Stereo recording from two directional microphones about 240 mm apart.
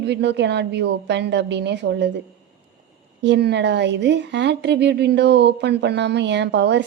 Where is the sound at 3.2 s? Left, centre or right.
Right.